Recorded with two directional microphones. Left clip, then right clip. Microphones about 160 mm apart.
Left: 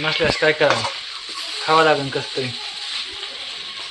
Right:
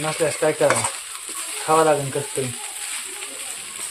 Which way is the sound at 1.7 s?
15° left (ahead or behind).